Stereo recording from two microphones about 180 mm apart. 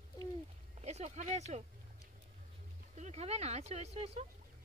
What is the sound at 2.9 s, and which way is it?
Speech, 35° right (ahead or behind).